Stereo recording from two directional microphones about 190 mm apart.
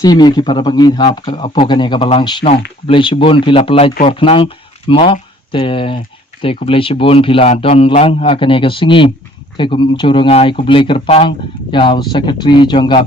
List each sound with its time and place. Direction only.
0.0 s speech: 20° left (ahead or behind)